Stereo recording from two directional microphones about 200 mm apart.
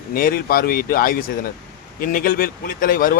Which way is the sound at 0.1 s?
45° left (ahead or behind).